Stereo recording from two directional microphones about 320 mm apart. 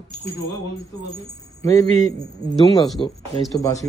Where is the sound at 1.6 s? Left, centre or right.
Centre.